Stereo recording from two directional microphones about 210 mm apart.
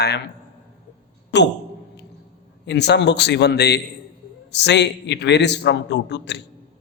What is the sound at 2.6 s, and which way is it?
A man's voice, 55° left (ahead or behind).